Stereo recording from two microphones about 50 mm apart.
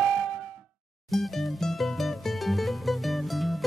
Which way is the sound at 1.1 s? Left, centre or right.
Centre.